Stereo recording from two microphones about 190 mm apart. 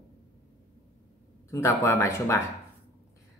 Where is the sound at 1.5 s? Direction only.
15° left (ahead or behind).